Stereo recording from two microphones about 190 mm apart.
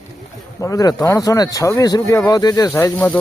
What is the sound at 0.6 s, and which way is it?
Speech, 15° left (ahead or behind).